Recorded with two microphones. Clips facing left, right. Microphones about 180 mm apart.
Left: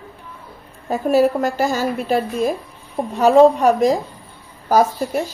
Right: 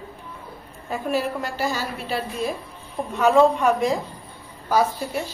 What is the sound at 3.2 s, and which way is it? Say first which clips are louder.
A woman's voice: left 5 dB; 35° left (ahead or behind).